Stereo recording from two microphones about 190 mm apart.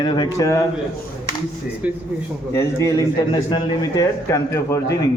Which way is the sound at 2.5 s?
15° left (ahead or behind).